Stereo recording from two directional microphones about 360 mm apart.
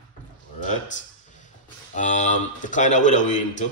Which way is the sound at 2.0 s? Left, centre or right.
Centre.